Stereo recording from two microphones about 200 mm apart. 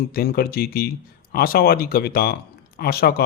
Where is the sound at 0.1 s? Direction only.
50° left (ahead or behind).